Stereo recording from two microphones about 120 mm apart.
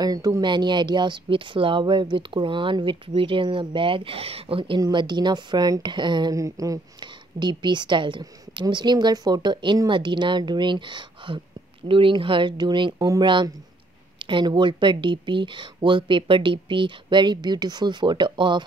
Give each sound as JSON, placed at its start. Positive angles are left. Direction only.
{"t": 0.0, "sound": "a woman's voice", "side_deg": -30}
{"t": 4.7, "sound": "a woman's voice", "side_deg": -35}
{"t": 6.3, "sound": "a woman's voice", "side_deg": -30}